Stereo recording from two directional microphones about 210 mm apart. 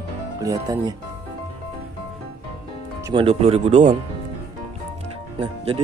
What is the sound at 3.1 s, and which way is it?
Speech, 25° right (ahead or behind).